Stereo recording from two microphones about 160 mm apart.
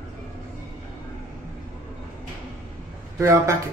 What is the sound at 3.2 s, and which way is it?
Speech, 20° right (ahead or behind).